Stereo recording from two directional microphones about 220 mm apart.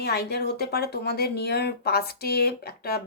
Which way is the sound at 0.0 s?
45° left (ahead or behind).